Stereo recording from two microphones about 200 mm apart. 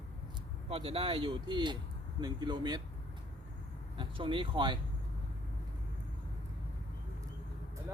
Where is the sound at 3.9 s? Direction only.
25° right (ahead or behind).